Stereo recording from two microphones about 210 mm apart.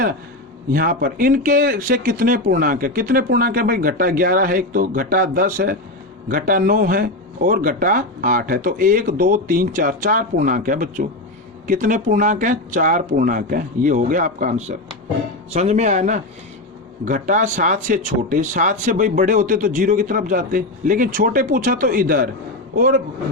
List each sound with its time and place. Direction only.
0.7 s a man's voice: 45° right (ahead or behind)